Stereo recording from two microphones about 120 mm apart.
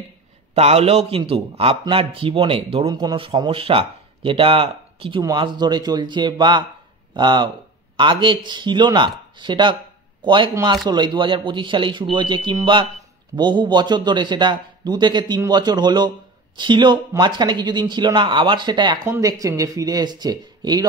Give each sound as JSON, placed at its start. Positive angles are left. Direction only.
{"t": 0.6, "sound": "a man's voice", "side_deg": -60}
{"t": 2.9, "sound": "a man's voice", "side_deg": -35}
{"t": 5.2, "sound": "a man's voice", "side_deg": -35}
{"t": 10.5, "sound": "a man's voice", "side_deg": -35}
{"t": 19.0, "sound": "speech", "side_deg": -25}